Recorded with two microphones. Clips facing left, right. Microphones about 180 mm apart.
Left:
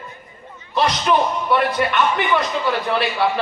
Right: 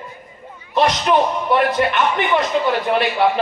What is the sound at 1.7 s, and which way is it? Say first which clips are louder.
A man's voice: right 1 dB; 25° right (ahead or behind).